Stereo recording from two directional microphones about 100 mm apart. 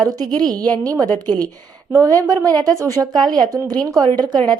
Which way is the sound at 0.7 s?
40° right (ahead or behind).